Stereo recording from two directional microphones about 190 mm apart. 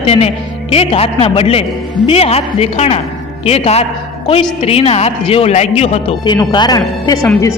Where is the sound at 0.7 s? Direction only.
30° left (ahead or behind).